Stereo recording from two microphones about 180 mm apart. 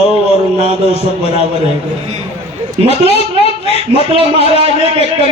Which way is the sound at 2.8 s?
35° left (ahead or behind).